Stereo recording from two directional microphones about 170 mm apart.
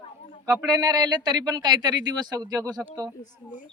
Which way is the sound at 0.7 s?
25° right (ahead or behind).